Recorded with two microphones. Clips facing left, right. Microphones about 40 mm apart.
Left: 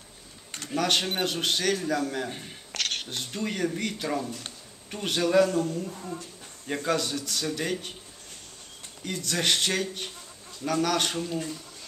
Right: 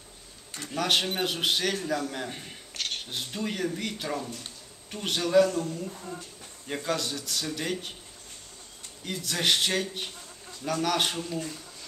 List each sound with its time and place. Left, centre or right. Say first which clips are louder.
0.7 s speech: left 1 dB; centre
2.7 s a sound: left 3 dB; left
3.1 s speech: left 1 dB; centre
9.0 s speech: even; centre